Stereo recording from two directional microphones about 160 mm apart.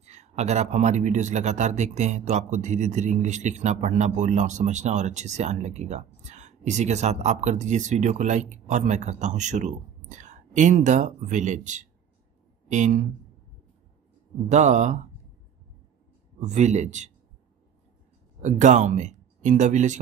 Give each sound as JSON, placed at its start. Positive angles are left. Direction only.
{"t": 0.0, "sound": "speech", "side_deg": -45}
{"t": 14.5, "sound": "speech", "side_deg": -45}
{"t": 16.3, "sound": "speech", "side_deg": -45}
{"t": 18.4, "sound": "speech", "side_deg": -50}